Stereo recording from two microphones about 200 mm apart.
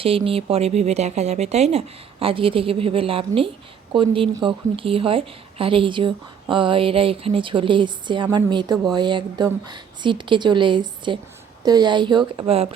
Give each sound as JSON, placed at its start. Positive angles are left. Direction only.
{"t": 0.0, "sound": "speech", "side_deg": -30}